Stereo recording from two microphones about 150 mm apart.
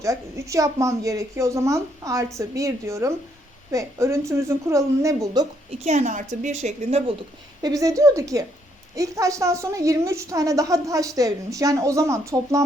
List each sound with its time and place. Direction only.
0.0 s a woman's voice: 20° right (ahead or behind)
5.8 s a woman's voice: 50° right (ahead or behind)
7.6 s a woman's voice: 20° right (ahead or behind)